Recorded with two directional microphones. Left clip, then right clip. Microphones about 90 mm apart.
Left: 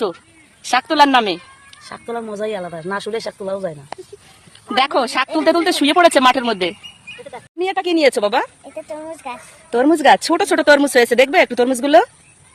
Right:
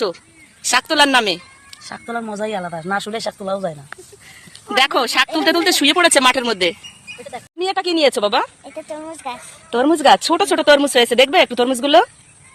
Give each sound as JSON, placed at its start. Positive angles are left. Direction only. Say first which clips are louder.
{"t": 0.6, "sound": "speech", "louder": "left 1 dB", "side_deg": 35}
{"t": 4.7, "sound": "speech", "louder": "right 1 dB", "side_deg": 40}
{"t": 7.9, "sound": "speech", "louder": "left 1 dB", "side_deg": 35}
{"t": 8.7, "sound": "speech", "louder": "left 1 dB", "side_deg": 5}
{"t": 9.6, "sound": "speech", "louder": "left 1 dB", "side_deg": 40}